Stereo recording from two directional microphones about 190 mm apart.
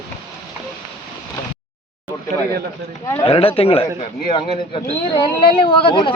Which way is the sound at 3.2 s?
30° left (ahead or behind).